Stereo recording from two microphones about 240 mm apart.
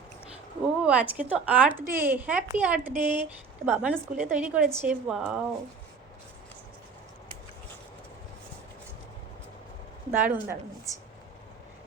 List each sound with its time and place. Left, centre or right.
0.8 s a woman's voice: centre
10.1 s speech: centre